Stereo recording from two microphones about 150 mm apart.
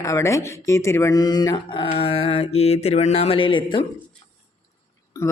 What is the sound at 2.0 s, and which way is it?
Mantra, 40° left (ahead or behind).